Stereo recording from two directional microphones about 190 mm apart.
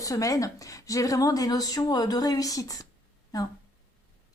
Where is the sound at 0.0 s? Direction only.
15° left (ahead or behind).